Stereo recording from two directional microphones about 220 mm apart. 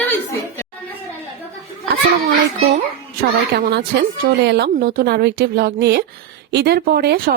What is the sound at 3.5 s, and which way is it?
Speech, 50° right (ahead or behind).